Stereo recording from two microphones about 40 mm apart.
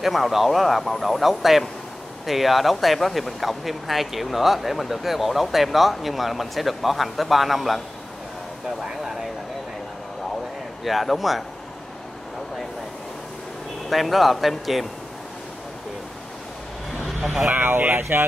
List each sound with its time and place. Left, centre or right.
0.0 s speech: centre
10.8 s speech: centre
13.8 s speech: centre
17.0 s vehicle: centre
17.5 s speech: right